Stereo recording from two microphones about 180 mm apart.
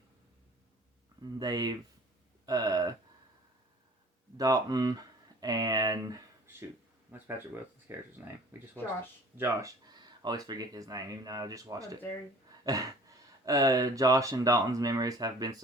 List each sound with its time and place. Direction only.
1.2 s speech: 25° right (ahead or behind)
2.5 s a sound: 20° right (ahead or behind)
4.4 s speech: 20° right (ahead or behind)
9.4 s speech: 15° right (ahead or behind)